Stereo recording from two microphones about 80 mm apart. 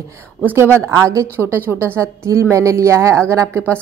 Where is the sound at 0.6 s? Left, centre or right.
Right.